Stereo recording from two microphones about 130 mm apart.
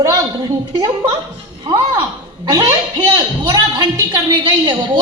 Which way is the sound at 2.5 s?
30° right (ahead or behind).